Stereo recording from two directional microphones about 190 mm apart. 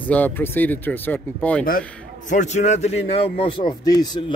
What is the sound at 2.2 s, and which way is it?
A man's voice, 40° left (ahead or behind).